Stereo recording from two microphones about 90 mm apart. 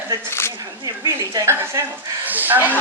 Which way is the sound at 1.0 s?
40° right (ahead or behind).